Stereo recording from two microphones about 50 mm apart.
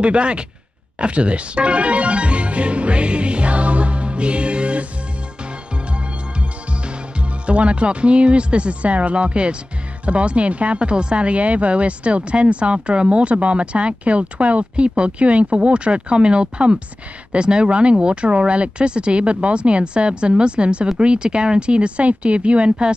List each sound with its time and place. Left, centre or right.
0.0 s speech: right
0.9 s music: right
7.2 s speech: right